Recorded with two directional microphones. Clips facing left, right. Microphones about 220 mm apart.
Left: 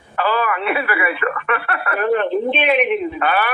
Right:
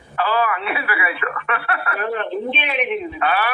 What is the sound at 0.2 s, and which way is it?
Speech, 55° left (ahead or behind).